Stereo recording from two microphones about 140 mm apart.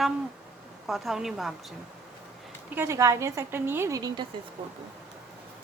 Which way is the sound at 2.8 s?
20° right (ahead or behind).